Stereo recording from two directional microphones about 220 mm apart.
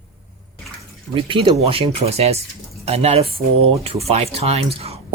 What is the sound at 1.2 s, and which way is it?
Speech, 25° right (ahead or behind).